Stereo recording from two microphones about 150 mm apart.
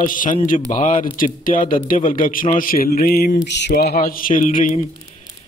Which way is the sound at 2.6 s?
80° left.